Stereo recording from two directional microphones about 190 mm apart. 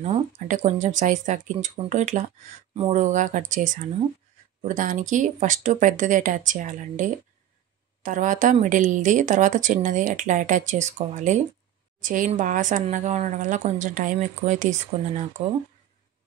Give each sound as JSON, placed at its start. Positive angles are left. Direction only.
{"t": 0.0, "sound": "speech", "side_deg": -35}